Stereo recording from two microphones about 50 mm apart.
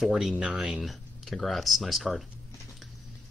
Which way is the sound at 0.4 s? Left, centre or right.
Right.